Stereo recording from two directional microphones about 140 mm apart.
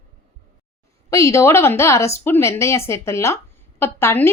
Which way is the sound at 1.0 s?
20° left (ahead or behind).